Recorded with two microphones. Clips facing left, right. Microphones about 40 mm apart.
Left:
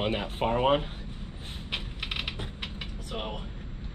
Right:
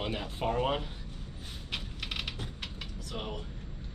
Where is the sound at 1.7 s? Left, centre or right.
Left.